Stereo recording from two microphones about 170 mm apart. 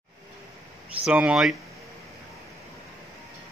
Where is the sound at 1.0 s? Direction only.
5° right (ahead or behind).